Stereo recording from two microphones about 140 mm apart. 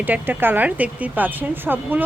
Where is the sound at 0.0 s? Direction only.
15° right (ahead or behind).